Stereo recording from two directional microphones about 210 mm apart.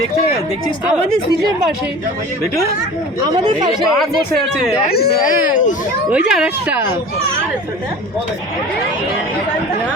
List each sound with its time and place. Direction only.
3.3 s speech: 20° right (ahead or behind)
4.9 s speech: 50° left (ahead or behind)
6.1 s speech: 5° right (ahead or behind)